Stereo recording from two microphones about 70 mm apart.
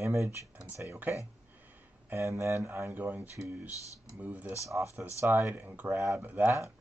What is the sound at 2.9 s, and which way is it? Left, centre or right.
Speech, right.